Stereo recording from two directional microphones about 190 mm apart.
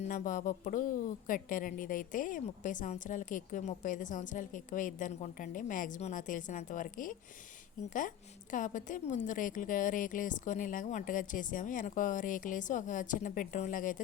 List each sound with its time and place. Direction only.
0.0 s a woman's voice: 45° left (ahead or behind)